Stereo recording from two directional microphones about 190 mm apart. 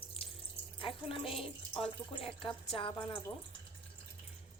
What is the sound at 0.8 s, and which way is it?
A woman's voice, 30° left (ahead or behind).